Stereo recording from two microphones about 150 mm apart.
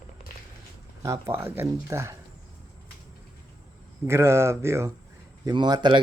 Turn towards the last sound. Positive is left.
turn(degrees=-30)  # may be behind; listen again after turning